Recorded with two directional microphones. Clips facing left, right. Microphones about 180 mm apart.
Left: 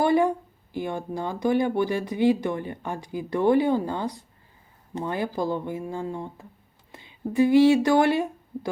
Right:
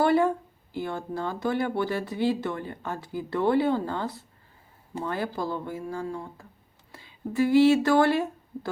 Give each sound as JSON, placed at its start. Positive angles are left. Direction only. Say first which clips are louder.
{"t": 0.0, "sound": "speech", "louder": "left 1 dB", "side_deg": 15}